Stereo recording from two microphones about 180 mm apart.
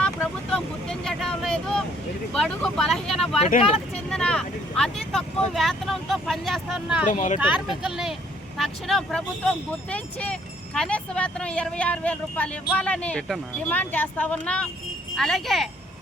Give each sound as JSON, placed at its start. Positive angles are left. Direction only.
{"t": 0.0, "sound": "vehicle", "side_deg": 5}
{"t": 2.3, "sound": "speech", "side_deg": 5}
{"t": 3.6, "sound": "speech", "side_deg": 30}
{"t": 4.1, "sound": "speech", "side_deg": 5}
{"t": 7.1, "sound": "speech", "side_deg": 45}
{"t": 7.3, "sound": "speech", "side_deg": -5}